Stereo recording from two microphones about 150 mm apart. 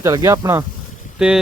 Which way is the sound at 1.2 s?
5° right (ahead or behind).